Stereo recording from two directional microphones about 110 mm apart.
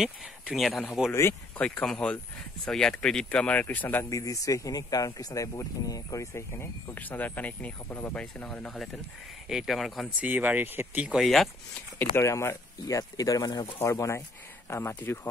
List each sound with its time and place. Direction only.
0.0 s speech: centre (ahead or behind); by 4.1 s 15° left (ahead or behind)
4.1 s speech: 30° left (ahead or behind); by 10.0 s centre (ahead or behind)
10.2 s speech: 15° right (ahead or behind)
11.1 s speech: centre (ahead or behind)
12.2 s speech: 25° left (ahead or behind)
13.7 s speech: 20° left (ahead or behind)